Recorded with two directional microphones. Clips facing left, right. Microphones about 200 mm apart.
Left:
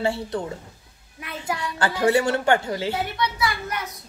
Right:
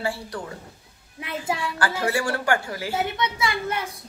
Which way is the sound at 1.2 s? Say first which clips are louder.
Right 2 dB; 25° right (ahead or behind).